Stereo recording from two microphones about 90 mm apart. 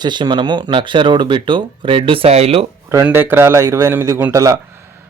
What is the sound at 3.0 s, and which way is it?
A man's voice, 20° right (ahead or behind).